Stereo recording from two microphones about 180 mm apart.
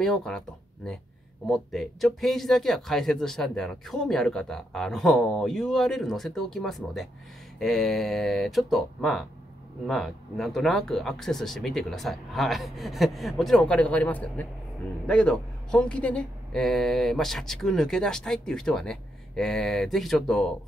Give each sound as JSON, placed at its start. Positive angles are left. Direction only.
{"t": 0.0, "sound": "speech", "side_deg": 5}
{"t": 1.5, "sound": "speech", "side_deg": 0}